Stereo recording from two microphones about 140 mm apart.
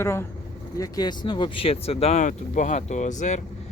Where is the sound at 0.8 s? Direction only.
30° left (ahead or behind); by 3.4 s 60° left (ahead or behind).